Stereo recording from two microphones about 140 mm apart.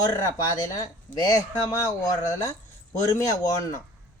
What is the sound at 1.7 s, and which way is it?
A man's voice, 25° left (ahead or behind).